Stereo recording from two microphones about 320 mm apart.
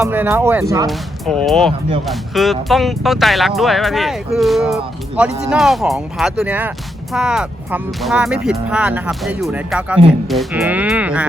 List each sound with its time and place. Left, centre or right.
0.0 s speech: centre